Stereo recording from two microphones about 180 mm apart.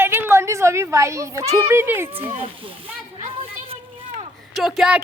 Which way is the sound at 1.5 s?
15° right (ahead or behind).